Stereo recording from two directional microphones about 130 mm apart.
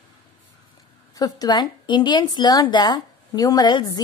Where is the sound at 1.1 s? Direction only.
30° left (ahead or behind).